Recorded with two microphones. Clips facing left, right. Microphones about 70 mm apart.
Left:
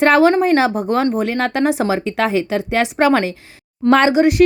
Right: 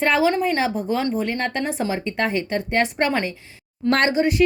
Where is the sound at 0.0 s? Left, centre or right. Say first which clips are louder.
Left 7 dB; left.